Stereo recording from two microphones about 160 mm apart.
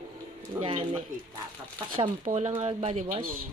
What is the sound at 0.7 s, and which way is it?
Speech, 30° right (ahead or behind).